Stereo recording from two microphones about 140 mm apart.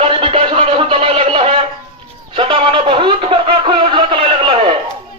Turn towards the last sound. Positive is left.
turn(degrees=-40)  # may be behind; listen again after turning